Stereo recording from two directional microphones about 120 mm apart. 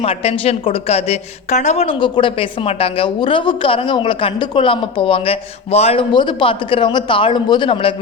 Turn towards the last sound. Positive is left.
turn(degrees=45)  # may be behind; listen again after turning